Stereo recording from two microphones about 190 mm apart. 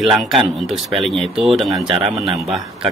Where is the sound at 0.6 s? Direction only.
Centre (ahead or behind).